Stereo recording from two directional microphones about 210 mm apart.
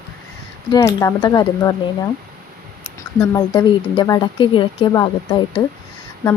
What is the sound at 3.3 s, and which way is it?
Speech, 15° left (ahead or behind).